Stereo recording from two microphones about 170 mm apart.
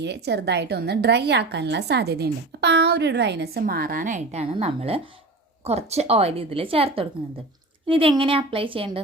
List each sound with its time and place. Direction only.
0.0 s a woman's voice: 85° right; by 9.0 s 30° right (ahead or behind)